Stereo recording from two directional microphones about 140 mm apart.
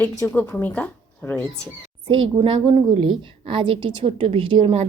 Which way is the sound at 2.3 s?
40° right (ahead or behind).